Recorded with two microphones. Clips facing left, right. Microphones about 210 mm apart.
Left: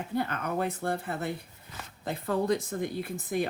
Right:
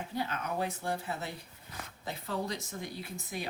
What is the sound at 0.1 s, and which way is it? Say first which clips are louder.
Speech: left 5 dB; 55° left (ahead or behind).